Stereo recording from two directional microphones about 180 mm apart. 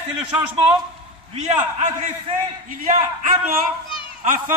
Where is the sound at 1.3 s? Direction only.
40° right (ahead or behind).